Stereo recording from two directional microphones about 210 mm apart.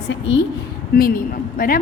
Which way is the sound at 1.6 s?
45° left (ahead or behind).